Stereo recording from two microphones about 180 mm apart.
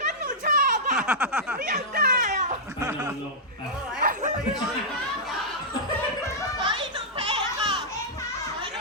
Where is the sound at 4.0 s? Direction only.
50° right (ahead or behind).